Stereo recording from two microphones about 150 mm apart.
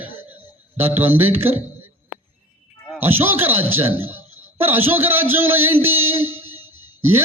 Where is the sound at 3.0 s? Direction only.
15° right (ahead or behind).